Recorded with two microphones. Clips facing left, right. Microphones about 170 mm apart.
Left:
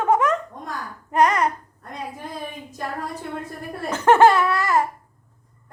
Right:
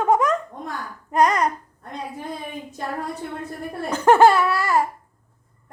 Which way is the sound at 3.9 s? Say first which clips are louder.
Even; 10° right (ahead or behind).